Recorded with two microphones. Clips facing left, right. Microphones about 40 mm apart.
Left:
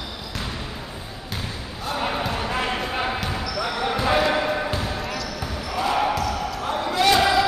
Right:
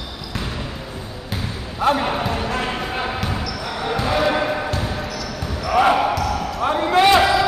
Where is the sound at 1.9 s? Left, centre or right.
Centre.